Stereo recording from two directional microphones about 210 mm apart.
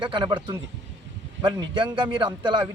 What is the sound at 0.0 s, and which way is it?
Speech, 20° right (ahead or behind).